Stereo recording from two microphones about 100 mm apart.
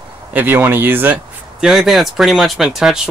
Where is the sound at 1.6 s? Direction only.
5° right (ahead or behind).